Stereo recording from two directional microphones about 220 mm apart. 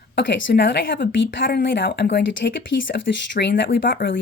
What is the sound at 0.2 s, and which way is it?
Speech, 55° left (ahead or behind).